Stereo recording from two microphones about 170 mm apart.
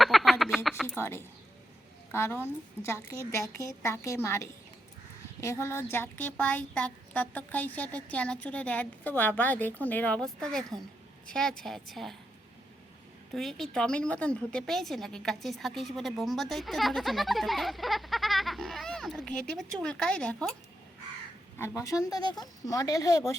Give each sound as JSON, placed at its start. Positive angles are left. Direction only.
{"t": 0.0, "sound": "frog", "side_deg": 0}
{"t": 0.9, "sound": "a woman's voice", "side_deg": 15}
{"t": 13.3, "sound": "a woman's voice", "side_deg": 0}
{"t": 21.8, "sound": "speech", "side_deg": 20}